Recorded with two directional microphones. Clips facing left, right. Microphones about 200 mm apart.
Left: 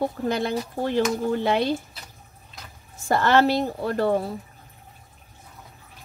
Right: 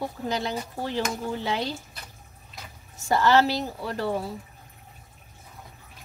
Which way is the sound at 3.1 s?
55° left (ahead or behind).